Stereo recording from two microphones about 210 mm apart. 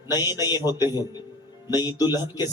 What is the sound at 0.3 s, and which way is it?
Speech, 20° left (ahead or behind).